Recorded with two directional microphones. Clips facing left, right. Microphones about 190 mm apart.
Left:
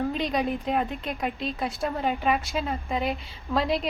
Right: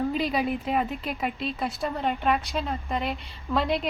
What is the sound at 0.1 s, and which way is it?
Speech, 5° right (ahead or behind).